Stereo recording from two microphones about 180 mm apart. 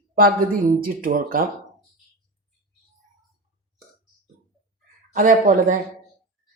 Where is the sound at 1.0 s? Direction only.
50° right (ahead or behind).